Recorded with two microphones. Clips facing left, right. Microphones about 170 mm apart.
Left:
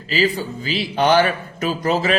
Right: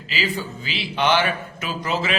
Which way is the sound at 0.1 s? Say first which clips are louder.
Left 7 dB; 40° left (ahead or behind).